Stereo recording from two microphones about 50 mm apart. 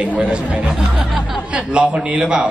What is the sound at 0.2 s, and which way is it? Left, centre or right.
A man's voice, right.